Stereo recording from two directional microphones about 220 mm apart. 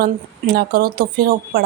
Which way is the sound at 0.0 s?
45° right (ahead or behind).